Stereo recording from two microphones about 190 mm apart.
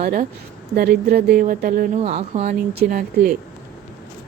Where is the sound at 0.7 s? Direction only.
55° right (ahead or behind).